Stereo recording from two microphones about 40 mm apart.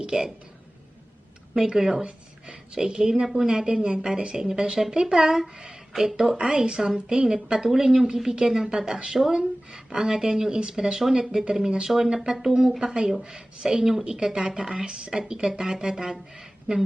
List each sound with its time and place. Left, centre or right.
0.0 s a woman's voice: centre
1.5 s speech: centre
5.9 s speech: centre
6.3 s speech: right